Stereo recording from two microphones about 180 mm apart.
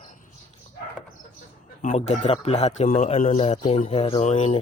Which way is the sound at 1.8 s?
40° left (ahead or behind).